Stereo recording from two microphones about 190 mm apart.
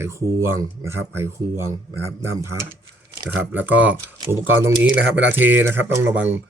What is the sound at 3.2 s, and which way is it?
Speech, 10° right (ahead or behind).